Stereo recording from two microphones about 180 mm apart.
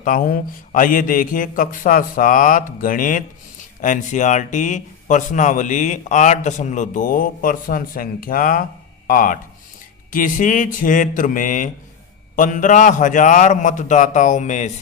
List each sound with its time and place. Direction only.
0.0 s a man's voice: 45° left (ahead or behind)